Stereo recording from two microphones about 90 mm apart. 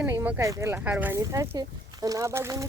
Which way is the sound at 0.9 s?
20° right (ahead or behind).